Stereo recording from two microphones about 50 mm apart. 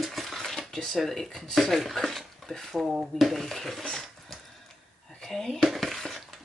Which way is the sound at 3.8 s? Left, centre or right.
Centre.